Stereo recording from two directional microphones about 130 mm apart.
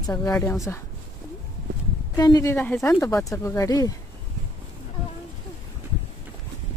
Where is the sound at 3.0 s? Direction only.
25° left (ahead or behind).